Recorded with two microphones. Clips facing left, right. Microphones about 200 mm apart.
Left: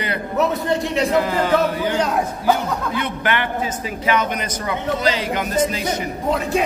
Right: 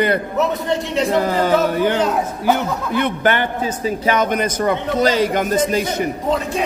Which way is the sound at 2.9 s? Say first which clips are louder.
Right 8 dB; 50° right (ahead or behind).